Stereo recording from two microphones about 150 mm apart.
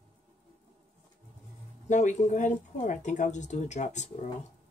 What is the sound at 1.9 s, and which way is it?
Speech, 50° left (ahead or behind).